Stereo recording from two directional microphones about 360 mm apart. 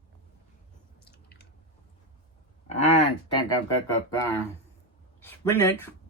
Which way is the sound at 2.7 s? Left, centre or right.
Centre.